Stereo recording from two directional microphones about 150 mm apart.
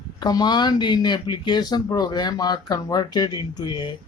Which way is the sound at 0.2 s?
25° left (ahead or behind).